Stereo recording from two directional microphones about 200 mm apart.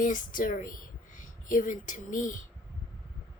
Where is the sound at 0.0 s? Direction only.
40° left (ahead or behind).